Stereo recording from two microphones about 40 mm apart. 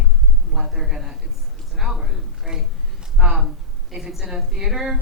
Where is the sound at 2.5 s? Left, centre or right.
Right.